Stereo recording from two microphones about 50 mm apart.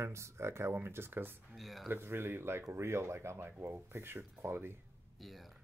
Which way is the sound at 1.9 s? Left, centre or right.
Right.